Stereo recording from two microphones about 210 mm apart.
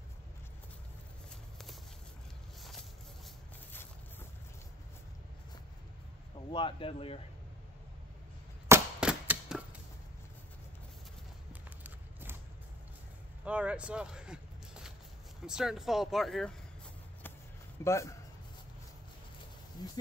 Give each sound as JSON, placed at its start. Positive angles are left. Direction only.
{"t": 6.5, "sound": "speech", "side_deg": 25}
{"t": 8.6, "sound": "cap gun", "side_deg": -10}
{"t": 11.8, "sound": "a sound", "side_deg": -10}
{"t": 13.5, "sound": "a sound", "side_deg": -5}
{"t": 15.4, "sound": "speech", "side_deg": -5}
{"t": 17.8, "sound": "speech", "side_deg": 15}
{"t": 19.8, "sound": "speech", "side_deg": 20}